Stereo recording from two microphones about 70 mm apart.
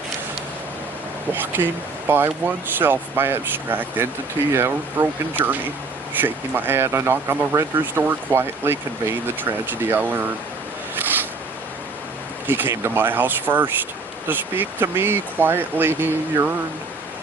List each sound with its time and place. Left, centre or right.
1.3 s speech: right
10.9 s zipper: right
12.5 s speech: right